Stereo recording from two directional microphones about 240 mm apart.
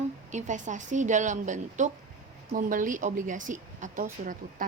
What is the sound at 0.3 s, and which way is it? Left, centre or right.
A woman's voice, right.